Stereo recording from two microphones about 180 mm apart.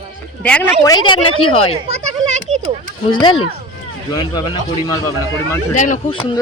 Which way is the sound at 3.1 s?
25° left (ahead or behind).